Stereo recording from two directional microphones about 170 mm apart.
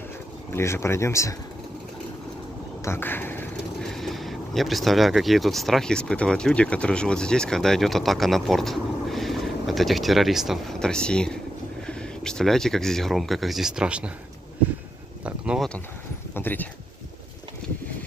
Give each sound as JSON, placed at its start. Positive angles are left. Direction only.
{"t": 0.5, "sound": "speech", "side_deg": 15}
{"t": 2.8, "sound": "speech", "side_deg": 15}
{"t": 15.2, "sound": "a sound", "side_deg": -5}
{"t": 16.3, "sound": "speech", "side_deg": 10}